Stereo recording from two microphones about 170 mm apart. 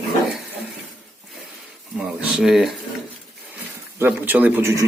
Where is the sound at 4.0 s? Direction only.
10° right (ahead or behind).